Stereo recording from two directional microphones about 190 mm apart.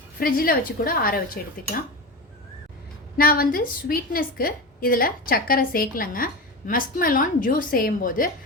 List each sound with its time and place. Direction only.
0.2 s a woman's voice: 50° left (ahead or behind)
3.2 s a woman's voice: 50° left (ahead or behind)